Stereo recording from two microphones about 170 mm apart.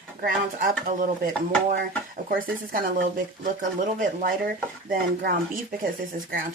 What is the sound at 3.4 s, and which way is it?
Stir, 50° right (ahead or behind).